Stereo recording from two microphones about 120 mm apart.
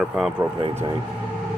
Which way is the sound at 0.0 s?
Centre (ahead or behind).